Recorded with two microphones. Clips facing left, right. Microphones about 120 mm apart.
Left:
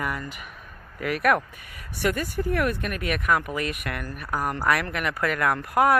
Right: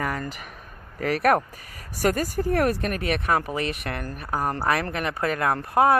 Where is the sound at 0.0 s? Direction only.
40° right (ahead or behind).